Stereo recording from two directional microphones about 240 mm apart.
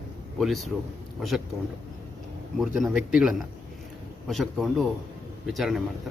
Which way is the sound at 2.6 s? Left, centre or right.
Centre.